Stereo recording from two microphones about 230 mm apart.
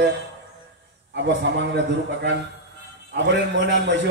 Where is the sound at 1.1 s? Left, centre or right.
Right.